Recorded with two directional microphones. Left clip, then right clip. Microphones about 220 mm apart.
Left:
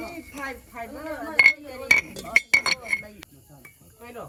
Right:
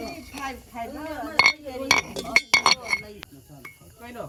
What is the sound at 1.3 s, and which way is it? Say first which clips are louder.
Chink: left 2 dB; centre (ahead or behind).